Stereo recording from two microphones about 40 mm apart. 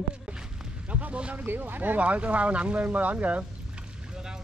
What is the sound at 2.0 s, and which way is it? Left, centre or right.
Speech, right.